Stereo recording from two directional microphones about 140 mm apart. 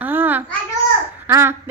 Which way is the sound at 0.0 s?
15° right (ahead or behind).